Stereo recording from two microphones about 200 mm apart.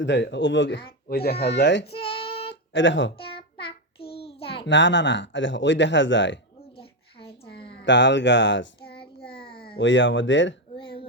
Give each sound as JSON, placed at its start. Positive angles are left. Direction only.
{"t": 0.0, "sound": "speech", "side_deg": 60}
{"t": 1.0, "sound": "speech", "side_deg": 50}
{"t": 1.8, "sound": "child singing", "side_deg": 30}
{"t": 2.5, "sound": "speech", "side_deg": 65}
{"t": 3.3, "sound": "child singing", "side_deg": 25}
{"t": 4.6, "sound": "speech", "side_deg": 65}
{"t": 7.7, "sound": "speech", "side_deg": 60}
{"t": 10.8, "sound": "a sound", "side_deg": 25}